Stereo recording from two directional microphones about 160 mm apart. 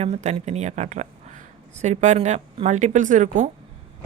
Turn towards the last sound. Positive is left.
turn(degrees=-55)  # may be behind; listen again after turning